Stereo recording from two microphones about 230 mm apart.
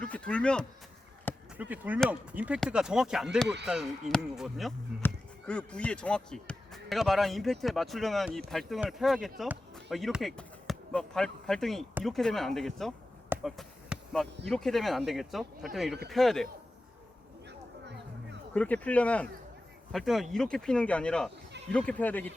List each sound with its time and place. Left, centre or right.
0.0 s speech: centre
1.5 s speech: centre
13.3 s basketball bounce: centre
14.4 s speech: centre
17.8 s music: right
18.5 s speech: centre